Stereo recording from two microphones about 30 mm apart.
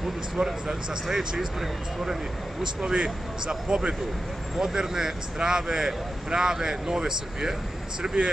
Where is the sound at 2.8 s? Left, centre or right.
Right.